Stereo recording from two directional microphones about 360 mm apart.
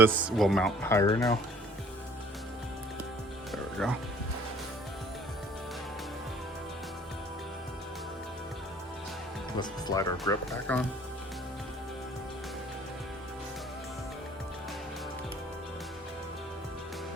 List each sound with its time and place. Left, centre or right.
0.0 s speech: centre
3.5 s music: centre
9.6 s speech: centre